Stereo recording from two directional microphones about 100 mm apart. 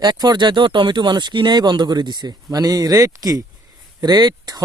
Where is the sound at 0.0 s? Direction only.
45° right (ahead or behind).